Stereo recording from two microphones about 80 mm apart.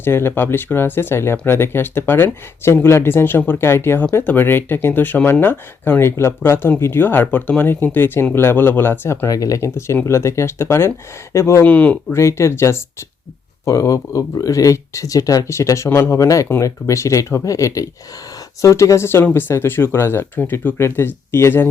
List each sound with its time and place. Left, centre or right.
0.0 s speech: left
9.3 s speech: left
11.6 s speech: centre
12.1 s speech: left